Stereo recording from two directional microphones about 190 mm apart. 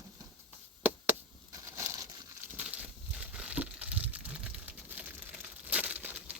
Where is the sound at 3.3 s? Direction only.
5° right (ahead or behind).